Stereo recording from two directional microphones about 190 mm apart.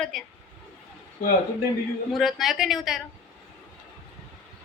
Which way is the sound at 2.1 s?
Centre (ahead or behind).